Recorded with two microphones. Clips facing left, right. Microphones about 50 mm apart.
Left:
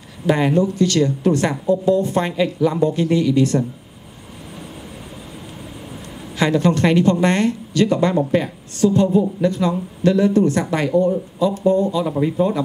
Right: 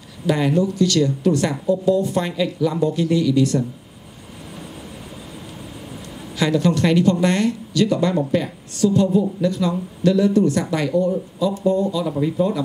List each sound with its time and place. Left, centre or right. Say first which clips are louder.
0.3 s speech: left 2 dB; left
6.3 s speech: left 2 dB; left